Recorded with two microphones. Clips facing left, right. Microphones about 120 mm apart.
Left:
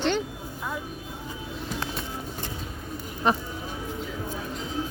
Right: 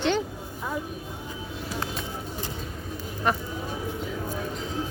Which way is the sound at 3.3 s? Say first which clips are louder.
Left 2 dB; 20° left (ahead or behind).